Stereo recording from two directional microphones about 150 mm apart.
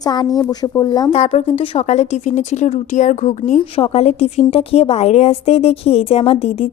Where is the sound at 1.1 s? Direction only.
45° left (ahead or behind).